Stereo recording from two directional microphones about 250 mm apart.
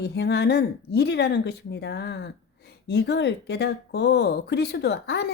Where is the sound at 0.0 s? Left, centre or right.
Left.